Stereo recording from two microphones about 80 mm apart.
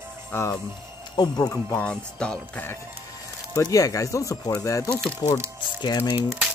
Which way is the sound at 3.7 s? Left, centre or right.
Left.